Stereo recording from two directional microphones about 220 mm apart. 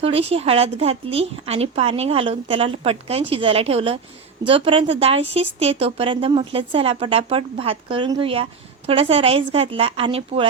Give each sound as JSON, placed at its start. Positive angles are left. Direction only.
{"t": 0.0, "sound": "speech", "side_deg": -25}